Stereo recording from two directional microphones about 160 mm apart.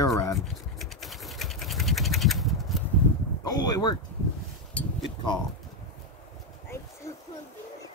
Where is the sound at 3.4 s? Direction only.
25° left (ahead or behind).